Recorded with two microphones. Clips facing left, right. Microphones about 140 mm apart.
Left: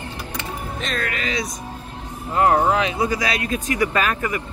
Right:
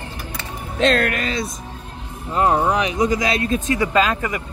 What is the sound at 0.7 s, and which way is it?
Speech, 80° right.